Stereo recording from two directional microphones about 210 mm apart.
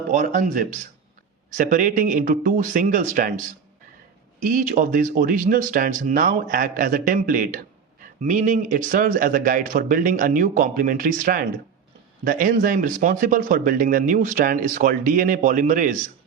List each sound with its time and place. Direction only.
0.1 s speech: 35° right (ahead or behind)
4.4 s speech: 40° right (ahead or behind)